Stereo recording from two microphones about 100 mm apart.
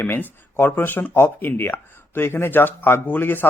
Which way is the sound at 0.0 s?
20° left (ahead or behind).